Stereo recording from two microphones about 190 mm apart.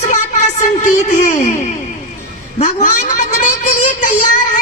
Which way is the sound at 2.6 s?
40° left (ahead or behind).